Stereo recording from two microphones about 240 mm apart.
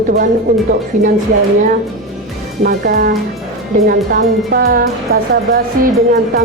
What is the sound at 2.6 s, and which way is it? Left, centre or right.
Speech, right.